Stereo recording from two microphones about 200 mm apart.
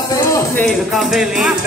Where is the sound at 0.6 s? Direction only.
Centre (ahead or behind).